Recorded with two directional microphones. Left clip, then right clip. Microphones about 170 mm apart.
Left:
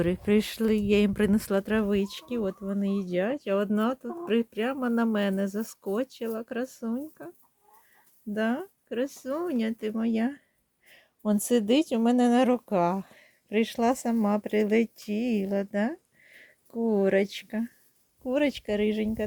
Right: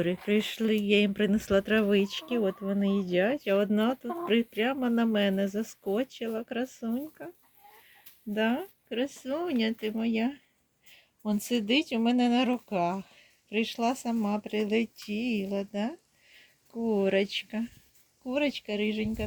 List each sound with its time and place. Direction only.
0.0 s speech: 30° left (ahead or behind)
1.5 s speech: 15° left (ahead or behind)
8.3 s speech: 15° left (ahead or behind); by 17.7 s 35° left (ahead or behind)
18.2 s speech: 45° left (ahead or behind)